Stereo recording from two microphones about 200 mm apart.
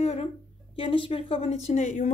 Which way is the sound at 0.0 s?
30° left (ahead or behind).